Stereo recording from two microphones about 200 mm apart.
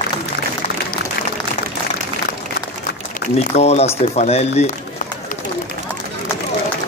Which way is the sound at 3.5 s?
30° left (ahead or behind).